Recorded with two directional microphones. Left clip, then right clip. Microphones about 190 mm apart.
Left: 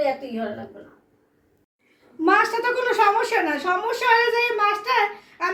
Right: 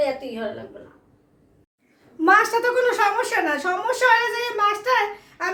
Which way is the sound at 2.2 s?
25° right (ahead or behind).